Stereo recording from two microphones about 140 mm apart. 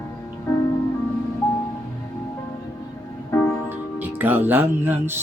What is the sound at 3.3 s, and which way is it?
Music, 20° left (ahead or behind).